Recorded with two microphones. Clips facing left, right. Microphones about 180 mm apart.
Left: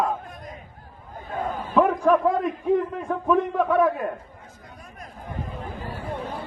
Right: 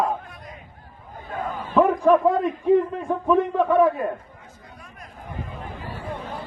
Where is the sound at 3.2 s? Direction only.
Centre (ahead or behind).